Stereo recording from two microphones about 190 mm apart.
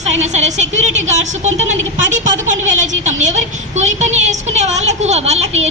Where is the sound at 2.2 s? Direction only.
40° right (ahead or behind).